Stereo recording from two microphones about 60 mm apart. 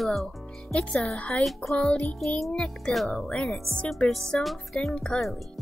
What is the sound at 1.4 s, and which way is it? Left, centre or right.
Speech, centre.